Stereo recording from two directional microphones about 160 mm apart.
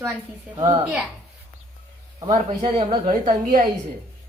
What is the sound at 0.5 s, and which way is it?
Speech, 25° right (ahead or behind).